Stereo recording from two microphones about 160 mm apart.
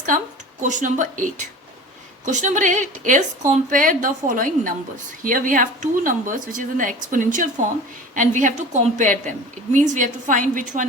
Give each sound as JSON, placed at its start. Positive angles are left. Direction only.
{"t": 0.1, "sound": "a woman's voice", "side_deg": -60}